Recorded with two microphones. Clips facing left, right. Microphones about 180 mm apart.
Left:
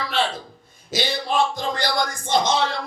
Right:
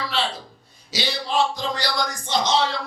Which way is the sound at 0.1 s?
50° left (ahead or behind).